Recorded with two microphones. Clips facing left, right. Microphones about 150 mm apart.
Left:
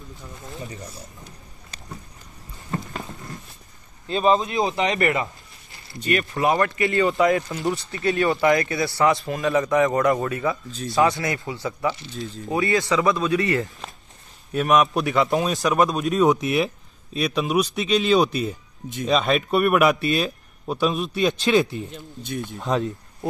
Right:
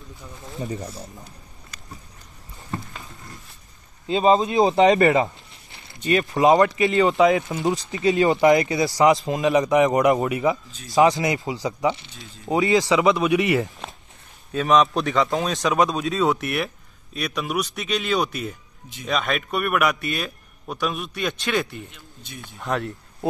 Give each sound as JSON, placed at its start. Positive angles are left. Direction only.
{"t": 4.1, "sound": "speech", "side_deg": -25}
{"t": 13.8, "sound": "a sound", "side_deg": 0}
{"t": 14.5, "sound": "a man's voice", "side_deg": 5}
{"t": 15.2, "sound": "speech", "side_deg": 20}
{"t": 15.5, "sound": "a man's voice", "side_deg": 0}
{"t": 16.1, "sound": "speech", "side_deg": 15}
{"t": 21.9, "sound": "speech", "side_deg": 45}
{"t": 22.6, "sound": "speech", "side_deg": 20}